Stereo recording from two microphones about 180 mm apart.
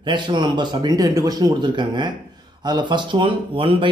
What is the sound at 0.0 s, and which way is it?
A man's voice, 25° right (ahead or behind).